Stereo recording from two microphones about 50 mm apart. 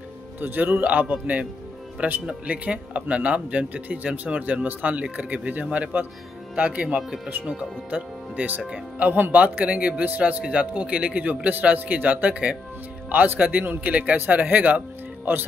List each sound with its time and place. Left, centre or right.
0.4 s speech: right
0.8 s speech: right
7.2 s speech: right